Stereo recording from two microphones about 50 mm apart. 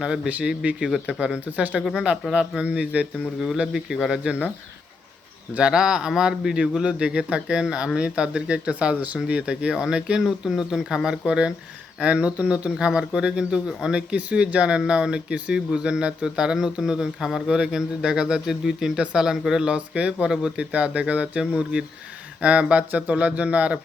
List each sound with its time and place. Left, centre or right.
0.6 s speech: right
2.6 s speech: centre
5.5 s speech: centre
14.1 s speech: right
19.7 s speech: right